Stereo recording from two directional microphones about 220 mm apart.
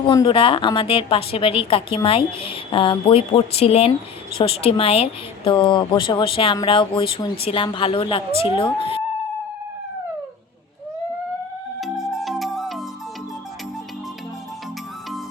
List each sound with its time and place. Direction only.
0.0 s a woman's voice: 20° left (ahead or behind)
11.8 s music: centre (ahead or behind)